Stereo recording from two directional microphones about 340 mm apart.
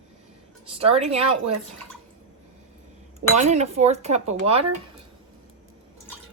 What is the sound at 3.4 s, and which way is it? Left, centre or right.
Speech, centre.